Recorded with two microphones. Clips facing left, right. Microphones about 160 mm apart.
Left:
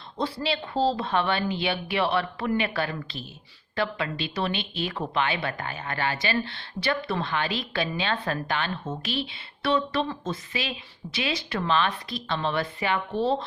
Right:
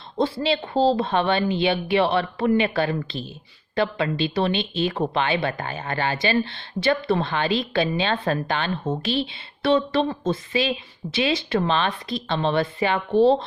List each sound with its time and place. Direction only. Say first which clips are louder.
0.2 s speech: right 6 dB; 25° right (ahead or behind)